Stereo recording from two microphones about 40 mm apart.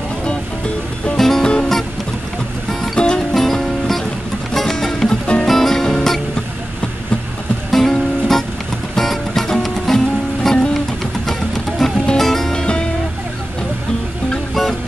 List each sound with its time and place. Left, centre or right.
1.1 s music: centre
2.7 s music: centre
5.2 s music: left
5.5 s music: centre
7.7 s music: centre
11.8 s music: centre
14.5 s music: centre